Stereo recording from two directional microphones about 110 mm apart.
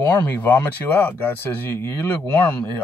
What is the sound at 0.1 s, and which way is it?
Speech, 15° left (ahead or behind).